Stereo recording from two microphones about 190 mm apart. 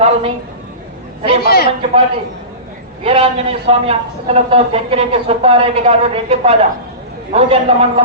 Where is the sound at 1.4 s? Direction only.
55° left (ahead or behind).